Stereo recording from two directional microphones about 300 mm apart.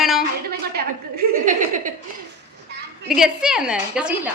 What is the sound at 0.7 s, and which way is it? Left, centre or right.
A woman's voice, right.